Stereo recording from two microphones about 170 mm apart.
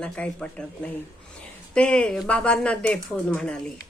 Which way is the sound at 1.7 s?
5° left (ahead or behind).